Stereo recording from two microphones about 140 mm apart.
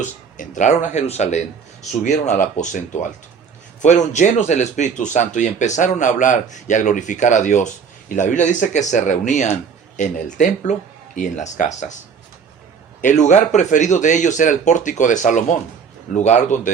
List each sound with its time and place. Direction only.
0.0 s speech: 65° left (ahead or behind)
13.0 s speech: 60° left (ahead or behind)